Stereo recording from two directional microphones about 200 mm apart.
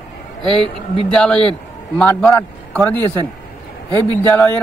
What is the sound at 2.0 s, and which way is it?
Speech, 5° left (ahead or behind).